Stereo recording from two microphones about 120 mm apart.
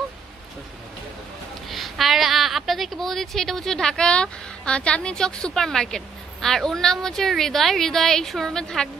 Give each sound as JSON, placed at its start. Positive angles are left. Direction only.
{"t": 1.7, "sound": "a woman's voice", "side_deg": 0}